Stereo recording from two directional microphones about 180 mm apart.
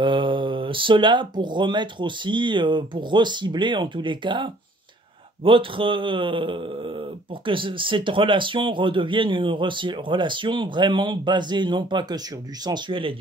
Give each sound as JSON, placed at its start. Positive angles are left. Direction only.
{"t": 0.0, "sound": "speech", "side_deg": -25}